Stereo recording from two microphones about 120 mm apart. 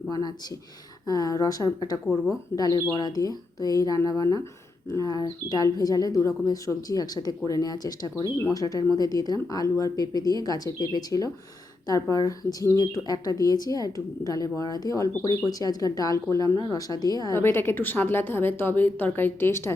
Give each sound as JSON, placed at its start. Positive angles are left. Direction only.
{"t": 0.1, "sound": "speech", "side_deg": 30}
{"t": 8.1, "sound": "speech", "side_deg": 20}
{"t": 17.3, "sound": "speech", "side_deg": 20}